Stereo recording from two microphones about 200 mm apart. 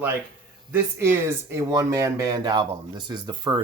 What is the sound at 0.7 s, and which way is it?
Speech, 10° right (ahead or behind).